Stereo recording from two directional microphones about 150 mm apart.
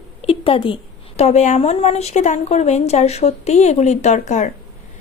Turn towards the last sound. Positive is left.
turn(degrees=50)  # may be behind; listen again after turning